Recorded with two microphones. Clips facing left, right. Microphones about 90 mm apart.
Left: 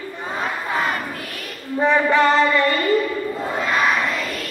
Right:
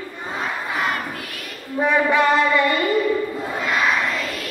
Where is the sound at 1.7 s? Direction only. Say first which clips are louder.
Left 1 dB; 10° right (ahead or behind).